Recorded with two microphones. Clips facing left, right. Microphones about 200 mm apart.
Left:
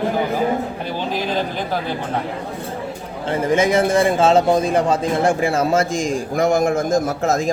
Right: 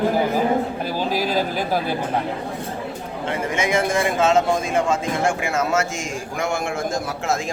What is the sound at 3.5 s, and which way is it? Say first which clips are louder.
A man's voice: left 6 dB; 30° left (ahead or behind).